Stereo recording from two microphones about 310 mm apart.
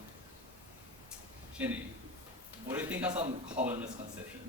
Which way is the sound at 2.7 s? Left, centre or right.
Centre.